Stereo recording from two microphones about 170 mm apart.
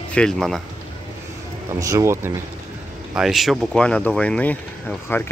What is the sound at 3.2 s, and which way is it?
Speech, centre (ahead or behind).